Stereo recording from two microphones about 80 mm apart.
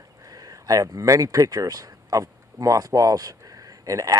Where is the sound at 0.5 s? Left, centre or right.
Right.